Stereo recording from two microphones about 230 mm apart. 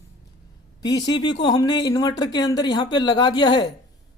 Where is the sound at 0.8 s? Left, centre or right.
Centre.